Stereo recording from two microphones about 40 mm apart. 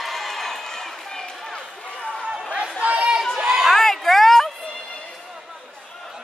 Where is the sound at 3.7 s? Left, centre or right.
Centre.